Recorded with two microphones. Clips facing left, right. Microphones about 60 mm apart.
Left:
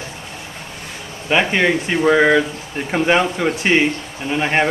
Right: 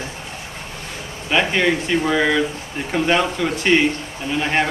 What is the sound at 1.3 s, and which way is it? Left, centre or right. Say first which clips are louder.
Speech: left 2 dB; left.